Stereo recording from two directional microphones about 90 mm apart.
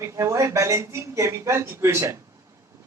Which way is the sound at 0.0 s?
35° right (ahead or behind).